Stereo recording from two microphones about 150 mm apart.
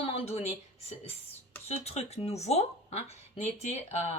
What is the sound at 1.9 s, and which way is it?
Speech, 45° left (ahead or behind).